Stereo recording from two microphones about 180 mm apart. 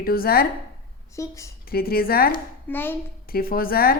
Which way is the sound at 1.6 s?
55° left (ahead or behind).